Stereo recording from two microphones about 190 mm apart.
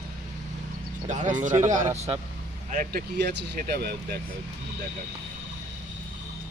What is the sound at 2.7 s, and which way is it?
Speech, 45° right (ahead or behind).